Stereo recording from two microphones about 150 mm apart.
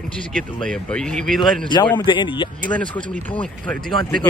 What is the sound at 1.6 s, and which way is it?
Speech, 30° left (ahead or behind).